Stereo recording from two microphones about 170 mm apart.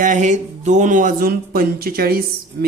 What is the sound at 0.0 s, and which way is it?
Speech, 45° right (ahead or behind).